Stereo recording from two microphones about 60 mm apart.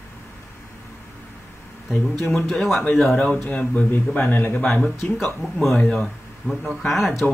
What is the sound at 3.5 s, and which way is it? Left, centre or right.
Speech, left.